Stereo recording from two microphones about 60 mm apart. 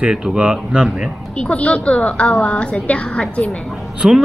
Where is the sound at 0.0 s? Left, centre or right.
Centre.